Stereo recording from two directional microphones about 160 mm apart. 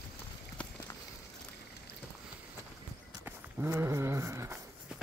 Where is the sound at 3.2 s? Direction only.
15° right (ahead or behind).